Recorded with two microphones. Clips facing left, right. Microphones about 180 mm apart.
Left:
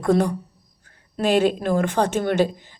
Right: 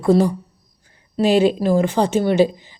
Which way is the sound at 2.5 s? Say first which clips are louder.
Right 2 dB; 50° left (ahead or behind).